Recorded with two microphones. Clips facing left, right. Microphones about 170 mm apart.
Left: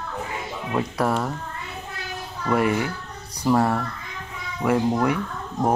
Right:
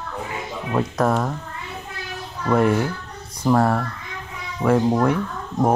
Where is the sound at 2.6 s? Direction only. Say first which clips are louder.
Right 4 dB; 5° left (ahead or behind).